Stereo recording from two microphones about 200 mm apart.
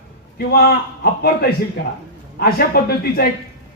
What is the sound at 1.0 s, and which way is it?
A man's voice, 50° left (ahead or behind).